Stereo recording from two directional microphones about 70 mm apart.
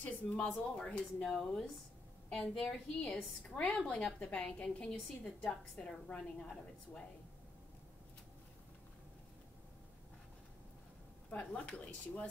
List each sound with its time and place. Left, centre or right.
0.0 s speech: left
0.7 s speech: centre
2.2 s a woman's voice: centre
11.2 s speech: centre